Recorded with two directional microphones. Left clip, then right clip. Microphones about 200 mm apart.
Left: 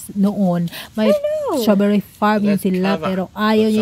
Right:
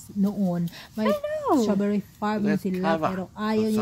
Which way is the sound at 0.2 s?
25° left (ahead or behind).